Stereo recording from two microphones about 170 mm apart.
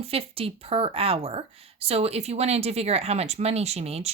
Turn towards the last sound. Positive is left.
turn(degrees=-40)  # may be behind; listen again after turning